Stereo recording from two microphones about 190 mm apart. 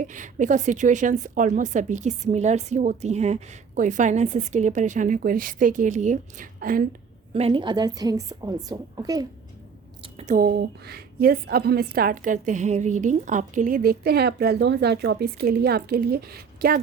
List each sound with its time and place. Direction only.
0.0 s a woman's voice: 40° right (ahead or behind)
7.3 s a woman's voice: 30° right (ahead or behind)
10.0 s a sound: 30° right (ahead or behind)
10.3 s a woman's voice: 50° right (ahead or behind)